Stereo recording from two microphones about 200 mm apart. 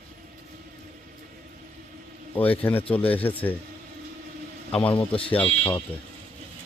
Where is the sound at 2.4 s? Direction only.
10° left (ahead or behind).